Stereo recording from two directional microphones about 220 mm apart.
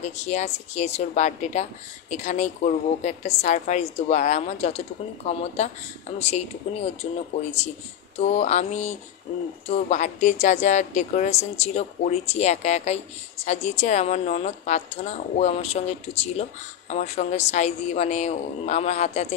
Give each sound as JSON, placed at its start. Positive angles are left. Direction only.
{"t": 0.0, "sound": "speech", "side_deg": 30}
{"t": 8.2, "sound": "speech", "side_deg": 30}